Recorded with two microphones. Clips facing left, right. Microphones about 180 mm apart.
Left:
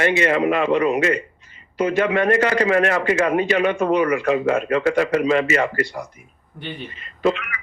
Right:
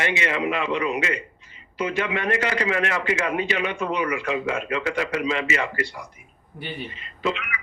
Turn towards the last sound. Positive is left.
turn(degrees=45)  # may be behind; listen again after turning